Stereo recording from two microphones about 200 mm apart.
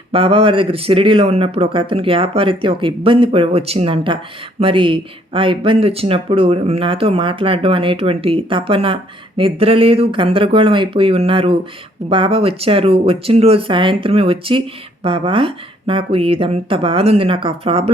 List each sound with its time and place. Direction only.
0.1 s speech: 25° right (ahead or behind)